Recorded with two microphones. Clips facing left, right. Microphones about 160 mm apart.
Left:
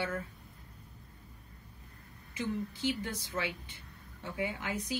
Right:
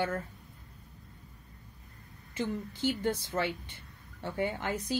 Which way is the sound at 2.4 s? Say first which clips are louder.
Right 2 dB; 50° right (ahead or behind).